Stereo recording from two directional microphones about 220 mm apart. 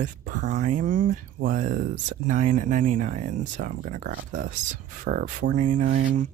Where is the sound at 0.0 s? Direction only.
40° right (ahead or behind).